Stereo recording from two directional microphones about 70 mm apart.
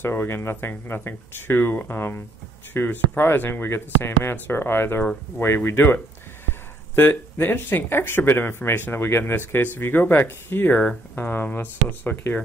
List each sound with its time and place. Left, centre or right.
0.0 s speech: left
7.0 s speech: left